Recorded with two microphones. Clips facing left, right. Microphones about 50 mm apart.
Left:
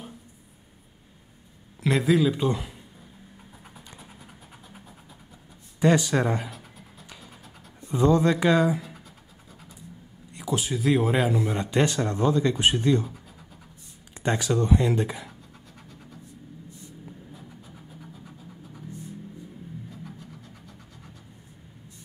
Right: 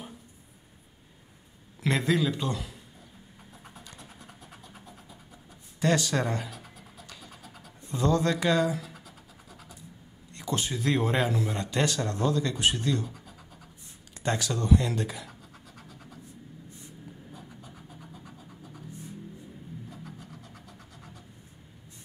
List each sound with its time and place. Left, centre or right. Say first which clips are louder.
1.8 s a man's voice: left 4 dB; centre
2.4 s speech: left 6 dB; centre
3.7 s vehicle: left 2 dB; centre
5.8 s speech: left 5 dB; centre
7.1 s pant: left 1 dB; centre
10.3 s speech: left 3 dB; centre; by 13.1 s left
14.2 s speech: left 5 dB; left
15.9 s scratch: left 3 dB; centre
17.3 s scratch: left 1 dB; centre